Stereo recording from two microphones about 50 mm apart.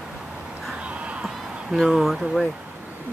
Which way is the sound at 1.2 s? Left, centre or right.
Centre.